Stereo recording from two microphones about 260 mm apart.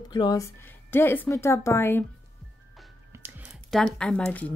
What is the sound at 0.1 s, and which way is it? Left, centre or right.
A woman's voice, centre.